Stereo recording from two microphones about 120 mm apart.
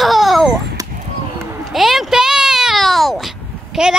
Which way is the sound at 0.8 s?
30° right (ahead or behind).